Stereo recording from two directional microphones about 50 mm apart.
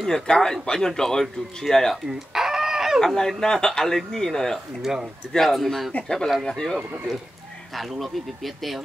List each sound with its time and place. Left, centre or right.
0.0 s speech: centre
2.0 s chicken: centre
3.0 s speech: centre
4.9 s speech: centre
5.3 s a man's voice: centre